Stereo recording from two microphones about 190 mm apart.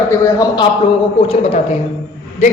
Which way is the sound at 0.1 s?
20° left (ahead or behind).